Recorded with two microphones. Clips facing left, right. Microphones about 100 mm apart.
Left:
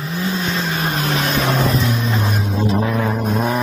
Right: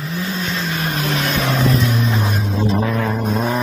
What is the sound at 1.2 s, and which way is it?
Vehicle, 15° left (ahead or behind).